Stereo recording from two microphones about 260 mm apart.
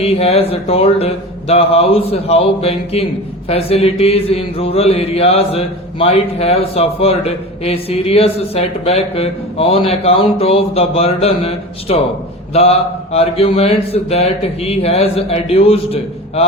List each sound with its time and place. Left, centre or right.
0.0 s mantra: left